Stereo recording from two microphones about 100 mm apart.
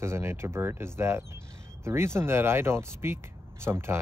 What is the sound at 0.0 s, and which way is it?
Speech, 25° right (ahead or behind).